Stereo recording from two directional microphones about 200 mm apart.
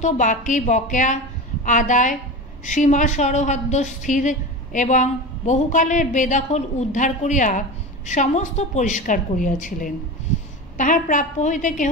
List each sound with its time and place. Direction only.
0.0 s a woman's voice: 40° left (ahead or behind)